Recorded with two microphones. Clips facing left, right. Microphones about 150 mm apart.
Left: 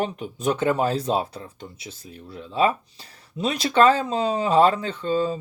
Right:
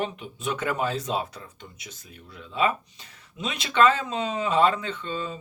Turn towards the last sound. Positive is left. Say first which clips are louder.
# left 8 dB
turn(degrees=35)  # may be behind; listen again after turning